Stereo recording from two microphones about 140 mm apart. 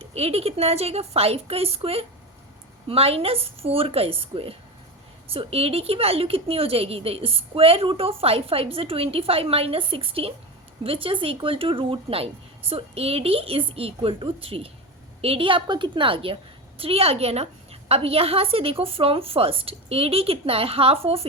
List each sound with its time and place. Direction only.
0.0 s a woman's voice: 45° right (ahead or behind)